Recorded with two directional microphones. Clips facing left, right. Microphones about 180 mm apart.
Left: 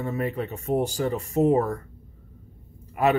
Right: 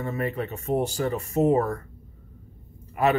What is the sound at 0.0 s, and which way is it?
Speech, 10° left (ahead or behind).